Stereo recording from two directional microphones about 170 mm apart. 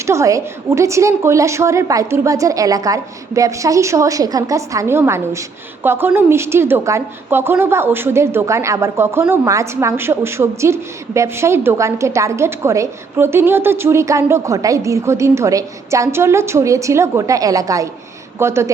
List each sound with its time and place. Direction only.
0.0 s a woman's voice: 15° right (ahead or behind)